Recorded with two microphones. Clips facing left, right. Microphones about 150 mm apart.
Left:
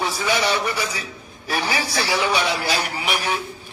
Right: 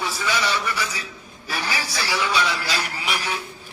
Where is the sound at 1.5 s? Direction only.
25° left (ahead or behind).